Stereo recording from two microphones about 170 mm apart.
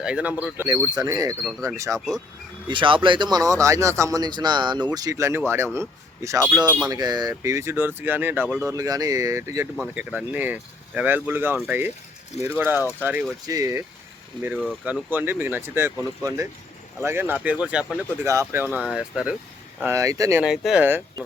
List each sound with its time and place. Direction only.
0.0 s speech: 5° right (ahead or behind)
0.7 s speech: 20° right (ahead or behind)
2.6 s speech: 30° right (ahead or behind); by 8.7 s 10° right (ahead or behind)
8.7 s speech: 20° right (ahead or behind)
9.7 s speech: 5° right (ahead or behind)
19.8 s speech: 15° right (ahead or behind)
20.4 s speech: 5° right (ahead or behind)